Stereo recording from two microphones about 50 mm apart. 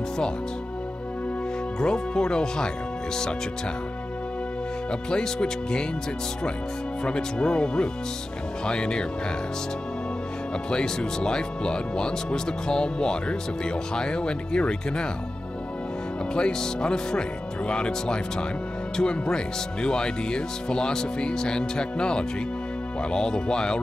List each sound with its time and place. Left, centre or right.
1.8 s speech: centre
5.1 s speech: centre
7.1 s speech: centre
10.7 s speech: centre
16.3 s speech: centre